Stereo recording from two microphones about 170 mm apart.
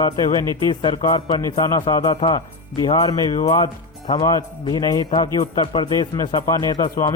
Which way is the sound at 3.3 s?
40° left (ahead or behind).